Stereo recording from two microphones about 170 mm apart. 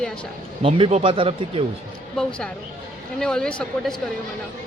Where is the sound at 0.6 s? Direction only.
35° right (ahead or behind).